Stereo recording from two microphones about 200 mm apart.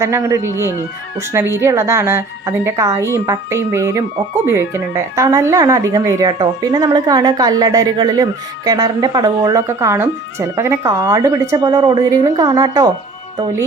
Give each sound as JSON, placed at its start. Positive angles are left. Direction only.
{"t": 0.0, "sound": "speech", "side_deg": -15}